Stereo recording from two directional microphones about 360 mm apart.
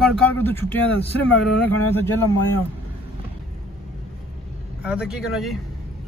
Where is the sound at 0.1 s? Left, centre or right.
Right.